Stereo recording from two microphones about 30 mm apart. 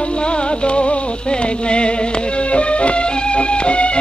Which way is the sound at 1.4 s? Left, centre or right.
Left.